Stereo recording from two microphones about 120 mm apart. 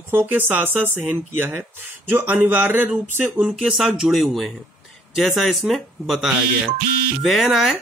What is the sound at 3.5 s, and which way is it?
Speech, centre (ahead or behind).